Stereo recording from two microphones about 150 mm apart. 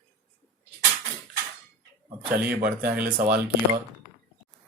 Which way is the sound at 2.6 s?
80° right.